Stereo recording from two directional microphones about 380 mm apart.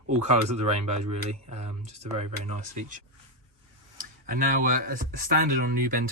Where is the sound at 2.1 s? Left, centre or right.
Centre.